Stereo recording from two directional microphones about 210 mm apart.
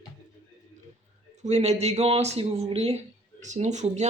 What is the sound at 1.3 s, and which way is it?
Speech, 35° right (ahead or behind).